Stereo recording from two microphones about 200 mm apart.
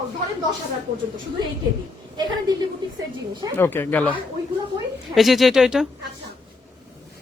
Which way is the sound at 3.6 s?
10° left (ahead or behind).